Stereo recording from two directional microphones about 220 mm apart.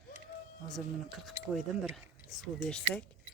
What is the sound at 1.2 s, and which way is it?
Speech, centre (ahead or behind).